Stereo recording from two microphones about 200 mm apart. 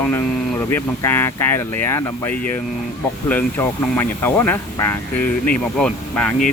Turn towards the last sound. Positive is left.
turn(degrees=5)  # may be behind; listen again after turning